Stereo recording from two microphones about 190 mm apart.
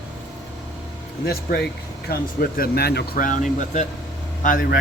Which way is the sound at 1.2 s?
55° left (ahead or behind).